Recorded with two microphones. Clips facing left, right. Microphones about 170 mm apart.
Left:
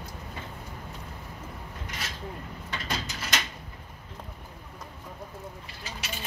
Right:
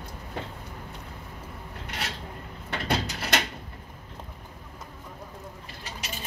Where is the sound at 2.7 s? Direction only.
65° right (ahead or behind).